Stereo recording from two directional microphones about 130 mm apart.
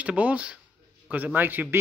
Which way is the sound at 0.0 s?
10° right (ahead or behind).